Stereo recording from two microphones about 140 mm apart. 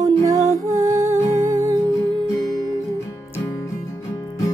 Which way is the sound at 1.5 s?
25° right (ahead or behind).